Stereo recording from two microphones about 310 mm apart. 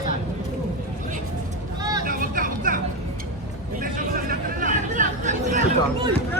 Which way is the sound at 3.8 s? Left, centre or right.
Right.